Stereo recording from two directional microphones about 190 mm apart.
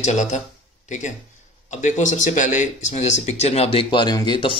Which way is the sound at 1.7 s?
40° left (ahead or behind).